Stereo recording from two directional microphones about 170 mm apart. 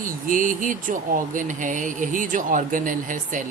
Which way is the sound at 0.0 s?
50° right (ahead or behind).